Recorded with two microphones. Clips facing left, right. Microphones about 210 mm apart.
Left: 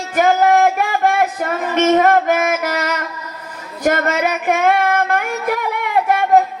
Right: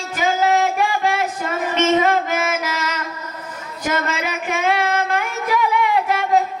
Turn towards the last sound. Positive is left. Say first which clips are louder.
# left 4 dB
turn(degrees=55)  # may be behind; listen again after turning